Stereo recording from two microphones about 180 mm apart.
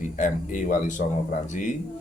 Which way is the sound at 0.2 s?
45° left (ahead or behind).